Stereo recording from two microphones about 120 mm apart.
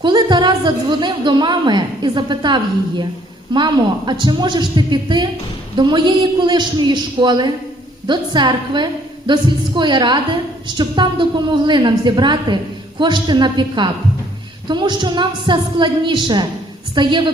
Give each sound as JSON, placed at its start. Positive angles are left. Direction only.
{"t": 0.0, "sound": "a woman's voice", "side_deg": -35}